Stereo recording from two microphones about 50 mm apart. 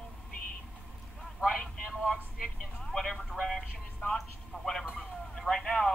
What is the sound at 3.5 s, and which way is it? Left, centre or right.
Music, centre.